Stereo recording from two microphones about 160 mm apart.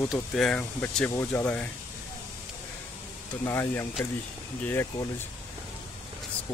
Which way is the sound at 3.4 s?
15° left (ahead or behind).